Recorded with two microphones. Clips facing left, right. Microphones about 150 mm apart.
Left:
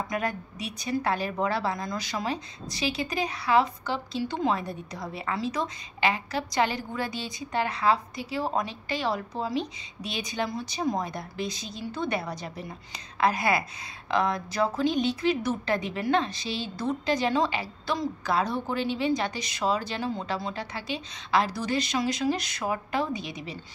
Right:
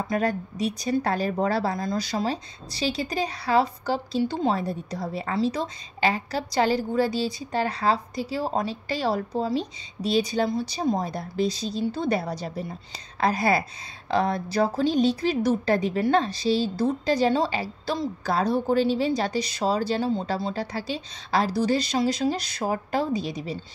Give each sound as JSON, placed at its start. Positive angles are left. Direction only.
{"t": 0.1, "sound": "a woman's voice", "side_deg": -35}